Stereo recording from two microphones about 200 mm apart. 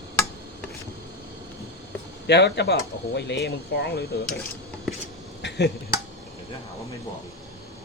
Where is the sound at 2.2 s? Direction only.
60° left (ahead or behind).